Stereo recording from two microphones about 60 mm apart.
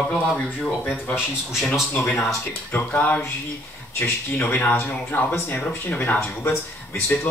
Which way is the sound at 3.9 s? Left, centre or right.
Left.